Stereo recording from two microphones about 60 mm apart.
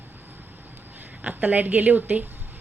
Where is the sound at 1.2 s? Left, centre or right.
Right.